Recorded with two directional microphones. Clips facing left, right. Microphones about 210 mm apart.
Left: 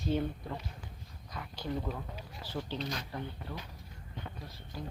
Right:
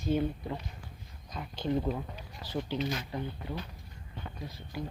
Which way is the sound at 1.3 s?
20° right (ahead or behind).